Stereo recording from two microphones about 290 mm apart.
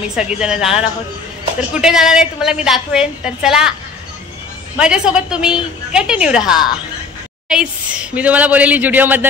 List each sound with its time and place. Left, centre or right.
0.1 s a woman's voice: centre
4.7 s a woman's voice: centre